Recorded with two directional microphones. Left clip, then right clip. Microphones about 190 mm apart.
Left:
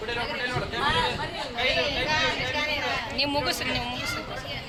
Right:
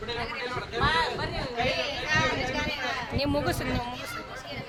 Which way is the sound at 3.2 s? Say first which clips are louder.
Left 1 dB; 35° right (ahead or behind).